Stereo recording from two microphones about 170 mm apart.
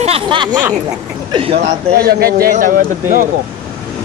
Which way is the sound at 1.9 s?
65° right (ahead or behind).